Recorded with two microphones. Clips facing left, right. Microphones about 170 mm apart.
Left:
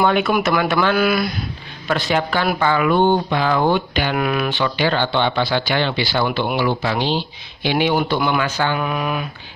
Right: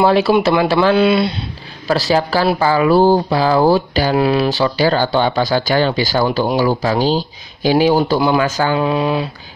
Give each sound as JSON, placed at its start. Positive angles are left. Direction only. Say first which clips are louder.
{"t": 0.0, "sound": "speech", "louder": "right 5 dB", "side_deg": -30}